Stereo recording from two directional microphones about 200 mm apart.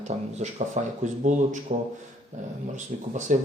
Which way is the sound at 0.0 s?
35° right (ahead or behind).